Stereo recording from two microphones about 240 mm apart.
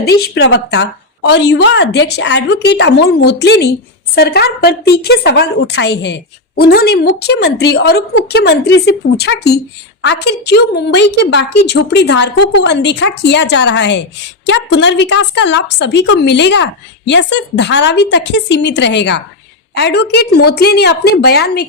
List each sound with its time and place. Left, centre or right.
0.2 s a woman's voice: left